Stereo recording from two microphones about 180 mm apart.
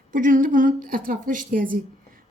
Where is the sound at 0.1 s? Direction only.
45° right (ahead or behind).